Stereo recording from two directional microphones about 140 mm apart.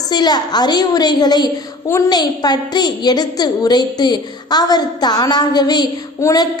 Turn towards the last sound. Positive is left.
turn(degrees=25)  # may be behind; listen again after turning